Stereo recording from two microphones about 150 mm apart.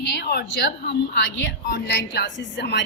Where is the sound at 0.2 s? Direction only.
90° left.